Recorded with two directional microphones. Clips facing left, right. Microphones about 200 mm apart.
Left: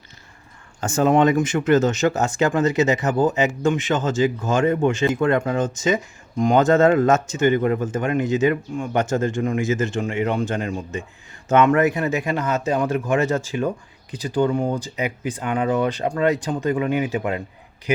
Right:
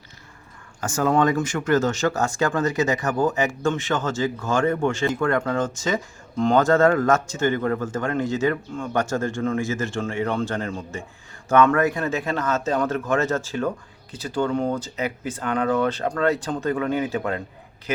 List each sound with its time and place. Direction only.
0.8 s speech: 25° left (ahead or behind)